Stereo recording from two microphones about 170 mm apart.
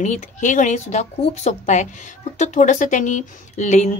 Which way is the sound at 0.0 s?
45° left (ahead or behind).